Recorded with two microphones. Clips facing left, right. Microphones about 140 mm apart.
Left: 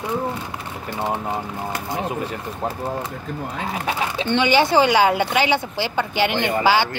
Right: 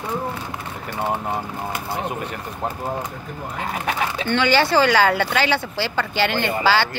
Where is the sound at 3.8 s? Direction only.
25° left (ahead or behind).